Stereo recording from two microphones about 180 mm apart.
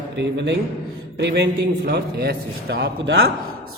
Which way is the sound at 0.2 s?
75° right (ahead or behind).